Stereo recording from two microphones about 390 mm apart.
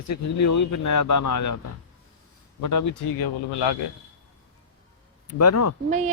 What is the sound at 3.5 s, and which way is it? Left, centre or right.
Speech, left.